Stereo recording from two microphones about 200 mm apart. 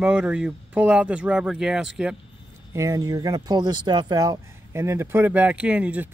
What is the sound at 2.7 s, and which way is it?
Speech, 15° right (ahead or behind).